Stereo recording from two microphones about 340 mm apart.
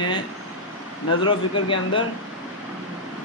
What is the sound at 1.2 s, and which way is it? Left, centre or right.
Speech, centre.